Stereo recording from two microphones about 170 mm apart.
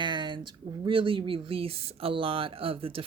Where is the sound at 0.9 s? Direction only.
30° right (ahead or behind).